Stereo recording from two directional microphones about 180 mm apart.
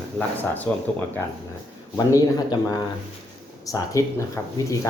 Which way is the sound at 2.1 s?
20° left (ahead or behind).